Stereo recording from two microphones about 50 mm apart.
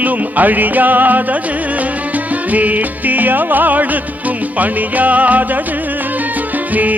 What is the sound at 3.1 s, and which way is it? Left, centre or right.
Music, right.